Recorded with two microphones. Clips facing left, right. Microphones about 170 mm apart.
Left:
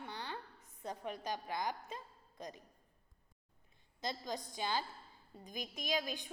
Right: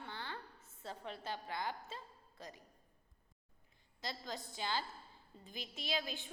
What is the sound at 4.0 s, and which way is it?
A woman's voice, 20° left (ahead or behind).